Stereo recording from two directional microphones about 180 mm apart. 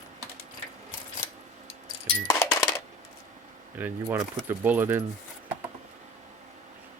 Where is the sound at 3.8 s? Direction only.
10° right (ahead or behind).